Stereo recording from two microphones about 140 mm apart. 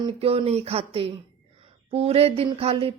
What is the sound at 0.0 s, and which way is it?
A woman's voice, 45° right (ahead or behind).